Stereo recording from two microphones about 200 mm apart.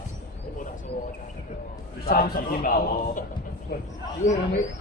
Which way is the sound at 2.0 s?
45° left (ahead or behind).